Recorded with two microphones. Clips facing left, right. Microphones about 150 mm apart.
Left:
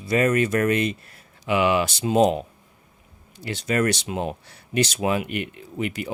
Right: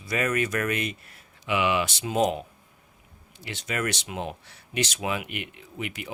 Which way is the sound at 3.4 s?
35° left (ahead or behind).